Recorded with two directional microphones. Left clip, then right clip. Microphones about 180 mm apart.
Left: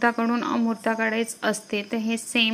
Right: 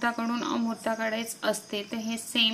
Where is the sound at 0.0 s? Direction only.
30° left (ahead or behind).